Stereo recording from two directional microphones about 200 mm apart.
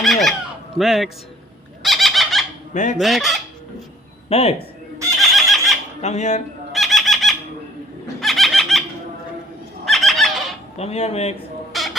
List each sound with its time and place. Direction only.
0.0 s a sound: centre (ahead or behind)
0.8 s fowl: centre (ahead or behind)
1.8 s squeal: centre (ahead or behind)
2.7 s speech: 35° left (ahead or behind)
3.0 s fowl: centre (ahead or behind)
4.3 s speech: 30° left (ahead or behind)
5.4 s a sound: centre (ahead or behind)
6.0 s speech: 35° left (ahead or behind)
6.7 s bird: centre (ahead or behind)
8.2 s a sound: centre (ahead or behind)
9.8 s a sound: centre (ahead or behind)
10.8 s speech: 30° left (ahead or behind)
11.7 s rodents: centre (ahead or behind)